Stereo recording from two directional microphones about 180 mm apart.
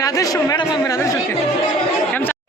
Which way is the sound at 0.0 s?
20° left (ahead or behind).